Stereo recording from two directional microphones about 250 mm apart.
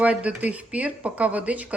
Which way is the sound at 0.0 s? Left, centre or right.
Centre.